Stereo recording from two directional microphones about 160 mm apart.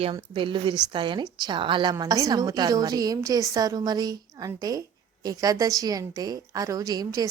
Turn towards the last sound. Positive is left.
turn(degrees=-20)  # may be behind; listen again after turning